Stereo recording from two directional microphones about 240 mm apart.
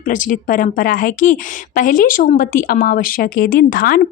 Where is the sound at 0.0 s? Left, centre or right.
Left.